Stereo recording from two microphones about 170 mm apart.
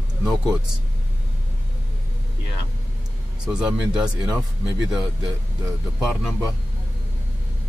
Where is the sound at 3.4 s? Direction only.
5° right (ahead or behind).